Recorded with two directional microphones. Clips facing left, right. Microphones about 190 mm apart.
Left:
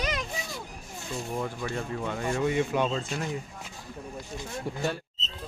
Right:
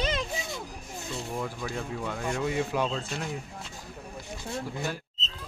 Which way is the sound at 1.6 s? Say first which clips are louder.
Left 1 dB; centre (ahead or behind).